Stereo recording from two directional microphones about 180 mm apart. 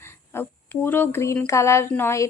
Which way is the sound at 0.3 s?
10° left (ahead or behind).